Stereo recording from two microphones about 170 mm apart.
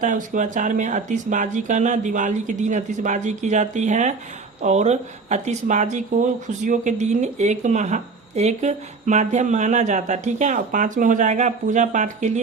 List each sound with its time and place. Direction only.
0.0 s speech: 50° right (ahead or behind)